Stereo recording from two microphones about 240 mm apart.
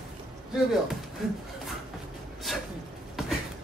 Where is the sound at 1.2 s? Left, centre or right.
Centre.